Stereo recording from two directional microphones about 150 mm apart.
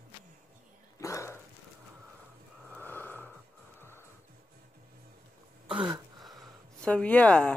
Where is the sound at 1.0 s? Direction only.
20° left (ahead or behind).